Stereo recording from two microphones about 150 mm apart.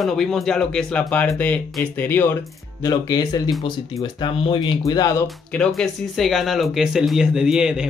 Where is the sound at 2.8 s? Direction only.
25° left (ahead or behind).